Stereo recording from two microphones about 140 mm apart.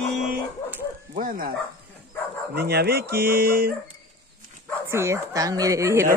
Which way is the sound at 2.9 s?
90° right.